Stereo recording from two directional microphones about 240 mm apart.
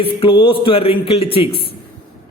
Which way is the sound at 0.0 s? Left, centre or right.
Left.